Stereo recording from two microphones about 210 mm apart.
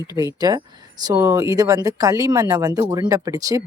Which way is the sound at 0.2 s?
15° right (ahead or behind).